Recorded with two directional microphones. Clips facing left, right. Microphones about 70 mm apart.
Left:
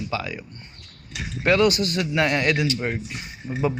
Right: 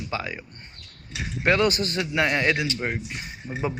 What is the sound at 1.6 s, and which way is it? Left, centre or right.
Speech, right.